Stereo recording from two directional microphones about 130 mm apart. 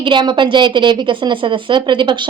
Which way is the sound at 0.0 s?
35° right (ahead or behind).